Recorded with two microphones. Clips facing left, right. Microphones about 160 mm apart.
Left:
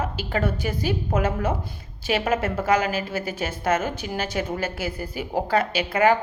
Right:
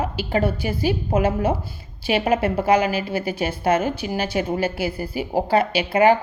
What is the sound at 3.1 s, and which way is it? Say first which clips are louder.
A woman's voice: right 4 dB; 10° right (ahead or behind).